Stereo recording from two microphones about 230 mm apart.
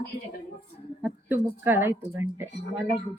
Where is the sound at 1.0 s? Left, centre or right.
Centre.